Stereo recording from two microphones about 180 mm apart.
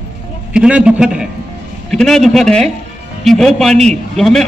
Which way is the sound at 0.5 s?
5° right (ahead or behind).